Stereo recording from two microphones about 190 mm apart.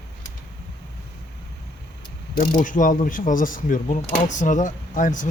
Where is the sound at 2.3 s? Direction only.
45° left (ahead or behind).